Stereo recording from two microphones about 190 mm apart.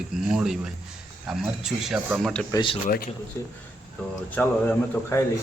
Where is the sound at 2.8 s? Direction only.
45° left (ahead or behind).